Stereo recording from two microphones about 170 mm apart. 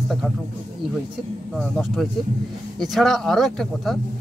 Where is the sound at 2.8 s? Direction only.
Centre (ahead or behind).